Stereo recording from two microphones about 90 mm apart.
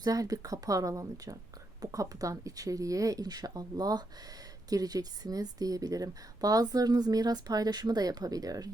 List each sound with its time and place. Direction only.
0.0 s speech: 40° right (ahead or behind)